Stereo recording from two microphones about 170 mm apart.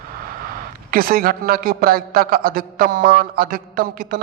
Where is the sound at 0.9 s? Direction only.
60° right (ahead or behind).